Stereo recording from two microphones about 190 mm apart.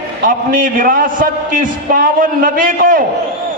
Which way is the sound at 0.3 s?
45° right (ahead or behind).